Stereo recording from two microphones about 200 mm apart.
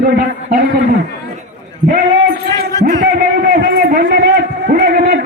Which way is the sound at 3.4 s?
45° right (ahead or behind).